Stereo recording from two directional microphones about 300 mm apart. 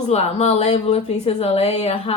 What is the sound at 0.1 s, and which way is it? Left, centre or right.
Speech, left.